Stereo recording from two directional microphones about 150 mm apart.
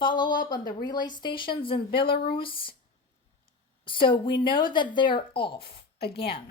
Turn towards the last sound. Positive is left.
turn(degrees=90)